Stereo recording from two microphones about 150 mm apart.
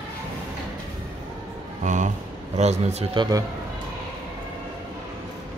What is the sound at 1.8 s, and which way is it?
Speech, 55° right (ahead or behind).